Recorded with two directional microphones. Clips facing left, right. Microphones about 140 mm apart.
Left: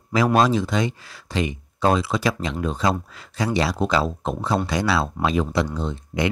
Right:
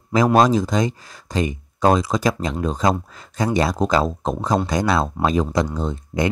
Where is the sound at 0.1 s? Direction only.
40° right (ahead or behind).